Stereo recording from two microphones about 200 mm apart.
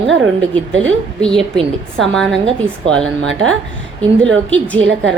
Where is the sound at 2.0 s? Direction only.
Centre (ahead or behind).